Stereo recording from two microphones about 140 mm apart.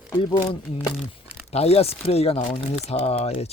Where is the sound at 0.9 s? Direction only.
5° right (ahead or behind).